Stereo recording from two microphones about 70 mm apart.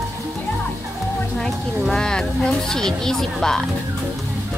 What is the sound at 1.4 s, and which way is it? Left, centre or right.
Speech, centre.